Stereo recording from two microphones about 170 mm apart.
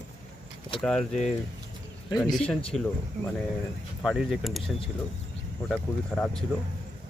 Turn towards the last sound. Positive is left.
turn(degrees=5)  # may be behind; listen again after turning